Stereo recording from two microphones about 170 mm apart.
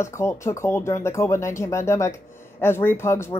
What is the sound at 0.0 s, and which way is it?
Speech, 15° left (ahead or behind).